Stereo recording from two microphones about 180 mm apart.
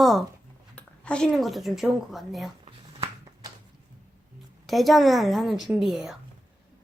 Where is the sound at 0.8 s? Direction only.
5° left (ahead or behind).